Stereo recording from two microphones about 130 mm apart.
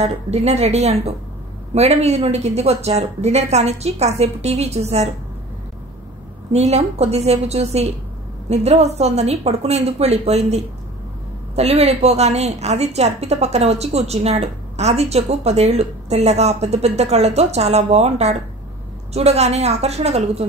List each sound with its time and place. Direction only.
0.0 s a woman's voice: 55° right (ahead or behind)
6.5 s a woman's voice: 55° right (ahead or behind)